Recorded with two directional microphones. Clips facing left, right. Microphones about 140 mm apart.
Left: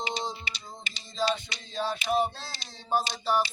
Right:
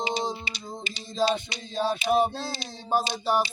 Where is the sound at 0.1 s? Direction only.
10° right (ahead or behind).